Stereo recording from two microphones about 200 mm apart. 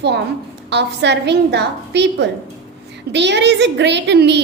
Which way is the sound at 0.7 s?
60° right (ahead or behind).